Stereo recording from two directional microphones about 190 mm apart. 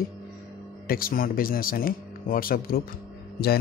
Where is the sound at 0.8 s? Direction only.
50° left (ahead or behind).